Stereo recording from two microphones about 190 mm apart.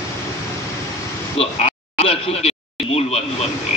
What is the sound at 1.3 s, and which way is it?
A man's voice, 30° left (ahead or behind).